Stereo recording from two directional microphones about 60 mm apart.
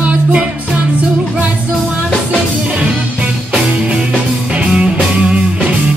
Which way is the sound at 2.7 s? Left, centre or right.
Right.